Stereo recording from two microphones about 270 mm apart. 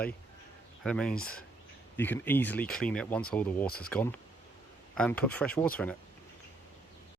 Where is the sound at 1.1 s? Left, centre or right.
Left.